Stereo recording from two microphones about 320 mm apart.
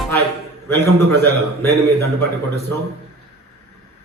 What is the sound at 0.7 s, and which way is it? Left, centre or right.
Speech, right.